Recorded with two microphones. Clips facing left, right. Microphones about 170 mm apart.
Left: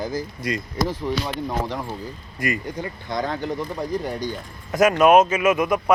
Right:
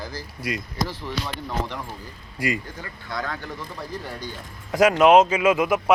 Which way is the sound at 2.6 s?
20° left (ahead or behind).